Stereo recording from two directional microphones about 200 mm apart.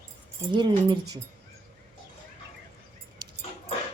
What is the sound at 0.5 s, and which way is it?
Speech, 25° right (ahead or behind).